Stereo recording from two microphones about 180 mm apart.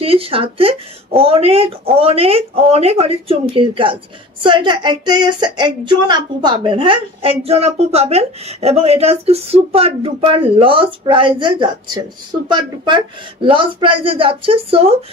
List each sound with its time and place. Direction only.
0.0 s speech: 30° right (ahead or behind)